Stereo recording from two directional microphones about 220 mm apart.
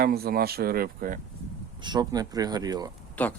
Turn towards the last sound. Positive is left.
turn(degrees=5)  # may be behind; listen again after turning